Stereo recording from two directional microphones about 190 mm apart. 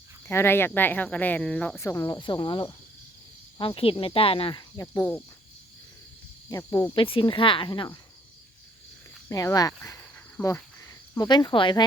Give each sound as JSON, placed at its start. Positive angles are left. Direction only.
{"t": 0.3, "sound": "speech", "side_deg": 10}
{"t": 4.8, "sound": "speech", "side_deg": 15}
{"t": 6.5, "sound": "speech", "side_deg": 15}
{"t": 7.0, "sound": "speech", "side_deg": 25}
{"t": 9.3, "sound": "speech", "side_deg": 20}
{"t": 11.1, "sound": "speech", "side_deg": 20}